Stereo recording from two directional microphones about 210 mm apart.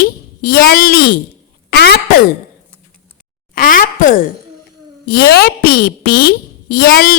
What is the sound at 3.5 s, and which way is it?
Speech, 40° left (ahead or behind).